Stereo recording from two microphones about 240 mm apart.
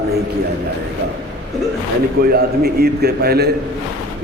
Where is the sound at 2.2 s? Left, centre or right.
Right.